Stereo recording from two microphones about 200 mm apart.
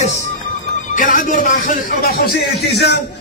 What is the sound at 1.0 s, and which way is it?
Speech, 40° left (ahead or behind).